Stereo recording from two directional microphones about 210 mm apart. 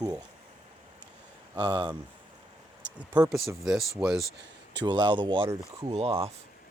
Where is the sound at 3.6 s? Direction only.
Centre (ahead or behind).